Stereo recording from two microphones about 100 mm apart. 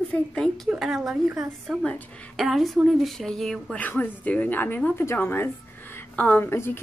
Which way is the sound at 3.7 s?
15° left (ahead or behind).